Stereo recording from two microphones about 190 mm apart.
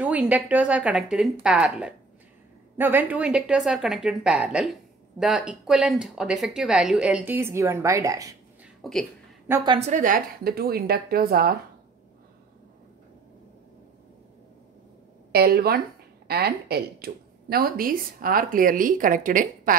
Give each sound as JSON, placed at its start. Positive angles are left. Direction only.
{"t": 0.0, "sound": "speech", "side_deg": -5}
{"t": 8.8, "sound": "speech", "side_deg": 0}
{"t": 9.7, "sound": "speech", "side_deg": -35}
{"t": 15.3, "sound": "speech", "side_deg": -55}